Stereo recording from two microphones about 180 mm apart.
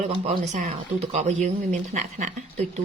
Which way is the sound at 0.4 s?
45° right (ahead or behind).